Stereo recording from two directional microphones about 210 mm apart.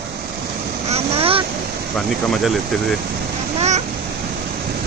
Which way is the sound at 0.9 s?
25° right (ahead or behind).